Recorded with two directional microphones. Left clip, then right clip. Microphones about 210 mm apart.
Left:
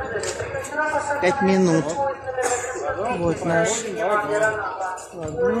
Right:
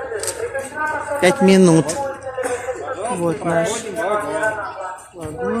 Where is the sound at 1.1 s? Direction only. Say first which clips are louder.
Right 8 dB; 40° right (ahead or behind).